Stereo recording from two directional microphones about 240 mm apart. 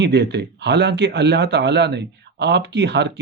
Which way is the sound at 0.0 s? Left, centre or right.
Right.